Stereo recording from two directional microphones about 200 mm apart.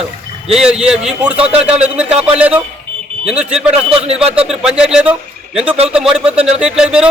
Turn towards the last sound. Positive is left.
turn(degrees=-5)  # may be behind; listen again after turning